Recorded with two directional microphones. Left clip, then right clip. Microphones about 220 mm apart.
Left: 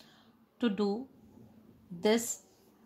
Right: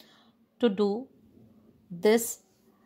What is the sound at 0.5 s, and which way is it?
Speech, 40° right (ahead or behind).